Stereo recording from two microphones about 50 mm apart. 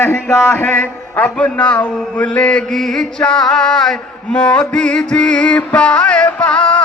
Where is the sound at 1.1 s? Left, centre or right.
Left.